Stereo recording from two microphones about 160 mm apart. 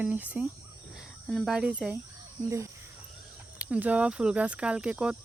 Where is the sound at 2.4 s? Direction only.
20° right (ahead or behind).